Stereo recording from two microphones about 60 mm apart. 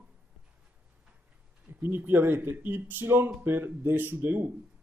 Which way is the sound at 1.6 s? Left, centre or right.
Right.